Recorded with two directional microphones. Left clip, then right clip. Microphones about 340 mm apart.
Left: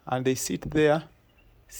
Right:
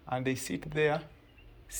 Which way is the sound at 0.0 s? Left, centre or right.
Left.